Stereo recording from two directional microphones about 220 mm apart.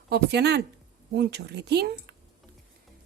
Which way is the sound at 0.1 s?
50° right (ahead or behind).